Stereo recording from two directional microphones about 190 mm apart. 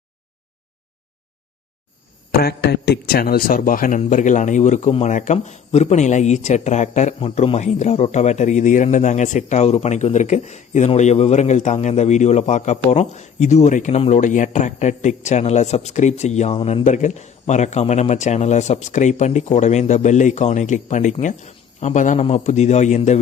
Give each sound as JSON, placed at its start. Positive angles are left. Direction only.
{"t": 2.4, "sound": "speech", "side_deg": 55}